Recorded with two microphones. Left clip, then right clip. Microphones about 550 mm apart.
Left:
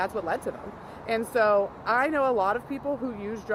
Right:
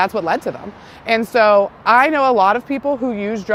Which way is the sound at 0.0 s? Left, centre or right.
Right.